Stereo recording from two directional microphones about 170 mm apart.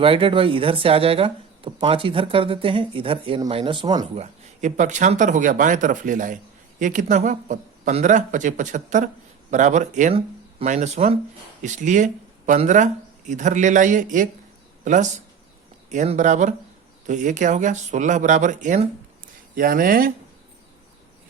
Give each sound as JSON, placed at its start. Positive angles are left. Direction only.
{"t": 0.0, "sound": "speech", "side_deg": -30}
{"t": 4.1, "sound": "speech", "side_deg": -45}